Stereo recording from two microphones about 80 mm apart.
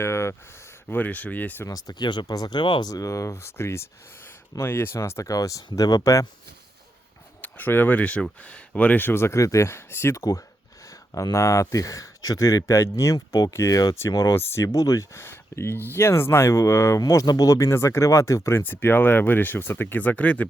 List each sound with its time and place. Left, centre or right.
0.0 s speech: left
1.6 s speech: left
2.9 s speech: left
4.9 s speech: left
7.4 s speech: left
10.2 s speech: left
13.1 s speech: left
13.5 s speech: left
18.6 s speech: left